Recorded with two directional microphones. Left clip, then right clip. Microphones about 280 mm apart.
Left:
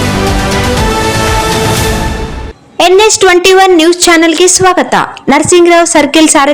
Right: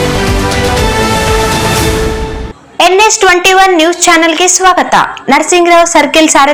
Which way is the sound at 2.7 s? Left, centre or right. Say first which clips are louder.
Left 1 dB; left.